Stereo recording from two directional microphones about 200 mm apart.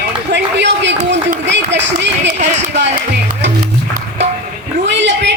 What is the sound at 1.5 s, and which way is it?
Run, 60° right (ahead or behind).